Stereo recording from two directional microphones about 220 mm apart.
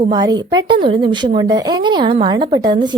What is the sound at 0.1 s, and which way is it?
Speech, 20° right (ahead or behind).